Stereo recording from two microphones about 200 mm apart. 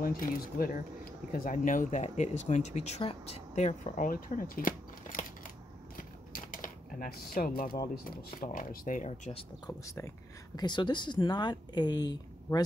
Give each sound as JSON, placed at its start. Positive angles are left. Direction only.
{"t": 0.0, "sound": "speech", "side_deg": 45}
{"t": 5.9, "sound": "typing", "side_deg": 40}
{"t": 7.9, "sound": "speech", "side_deg": 45}
{"t": 9.7, "sound": "speech", "side_deg": 15}